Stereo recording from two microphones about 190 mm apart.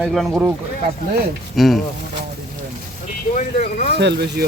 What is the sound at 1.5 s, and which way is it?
Speech, centre (ahead or behind).